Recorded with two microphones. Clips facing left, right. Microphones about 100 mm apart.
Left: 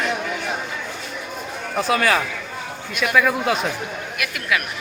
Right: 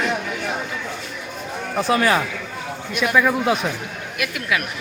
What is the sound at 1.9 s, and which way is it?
Speech, 25° right (ahead or behind).